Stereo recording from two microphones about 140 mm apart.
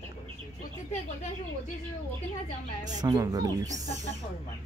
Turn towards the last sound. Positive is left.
turn(degrees=-25)  # may be behind; listen again after turning